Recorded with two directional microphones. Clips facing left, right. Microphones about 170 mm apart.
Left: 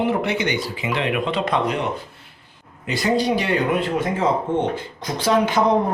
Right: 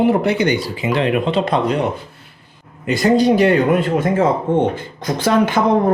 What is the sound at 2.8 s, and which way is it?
Speech, 50° right (ahead or behind).